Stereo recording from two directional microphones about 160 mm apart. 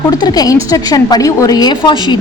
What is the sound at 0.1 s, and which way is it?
A woman's voice, 25° left (ahead or behind).